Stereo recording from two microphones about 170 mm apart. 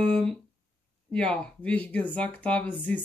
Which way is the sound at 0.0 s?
5° left (ahead or behind).